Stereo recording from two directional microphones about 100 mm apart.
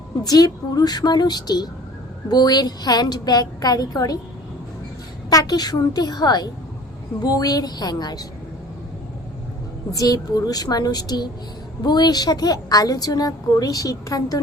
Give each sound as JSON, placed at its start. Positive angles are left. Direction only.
{"t": 0.3, "sound": "a woman's voice", "side_deg": 40}
{"t": 5.3, "sound": "a woman's voice", "side_deg": 40}
{"t": 9.9, "sound": "a woman's voice", "side_deg": 35}